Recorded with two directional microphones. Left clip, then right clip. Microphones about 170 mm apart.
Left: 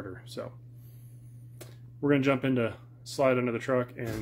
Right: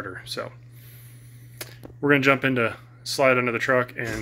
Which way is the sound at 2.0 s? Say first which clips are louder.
Right 7 dB; 10° left (ahead or behind).